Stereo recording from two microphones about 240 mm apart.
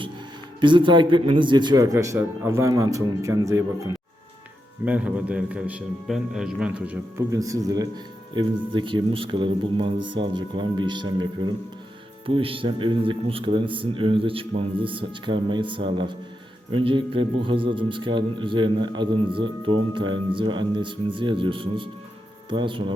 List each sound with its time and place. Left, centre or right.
0.6 s a man's voice: centre
4.9 s a man's voice: centre